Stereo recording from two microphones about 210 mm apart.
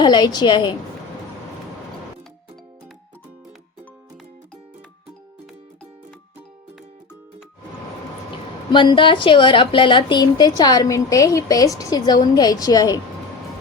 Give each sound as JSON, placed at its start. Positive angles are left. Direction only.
{"t": 0.0, "sound": "a woman's voice", "side_deg": 20}
{"t": 8.7, "sound": "a woman's voice", "side_deg": 20}